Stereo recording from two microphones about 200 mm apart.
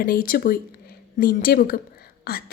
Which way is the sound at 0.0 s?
45° left (ahead or behind).